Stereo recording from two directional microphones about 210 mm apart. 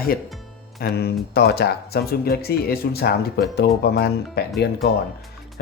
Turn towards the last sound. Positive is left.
turn(degrees=50)  # may be behind; listen again after turning